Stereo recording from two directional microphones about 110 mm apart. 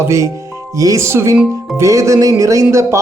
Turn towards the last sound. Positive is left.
turn(degrees=-25)  # may be behind; listen again after turning